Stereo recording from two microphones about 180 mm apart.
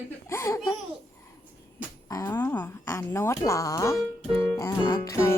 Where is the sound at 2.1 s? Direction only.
15° left (ahead or behind).